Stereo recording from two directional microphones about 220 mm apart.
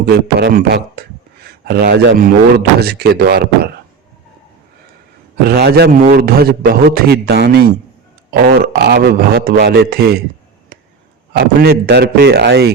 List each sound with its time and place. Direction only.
0.0 s a man's voice: 45° right (ahead or behind)
5.5 s a man's voice: 45° right (ahead or behind)
11.3 s a man's voice: 45° right (ahead or behind)